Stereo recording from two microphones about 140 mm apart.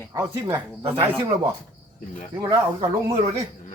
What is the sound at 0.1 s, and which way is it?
Speech, 30° right (ahead or behind).